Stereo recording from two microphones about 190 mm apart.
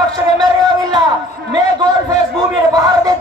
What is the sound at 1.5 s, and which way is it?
A man's voice, 20° right (ahead or behind).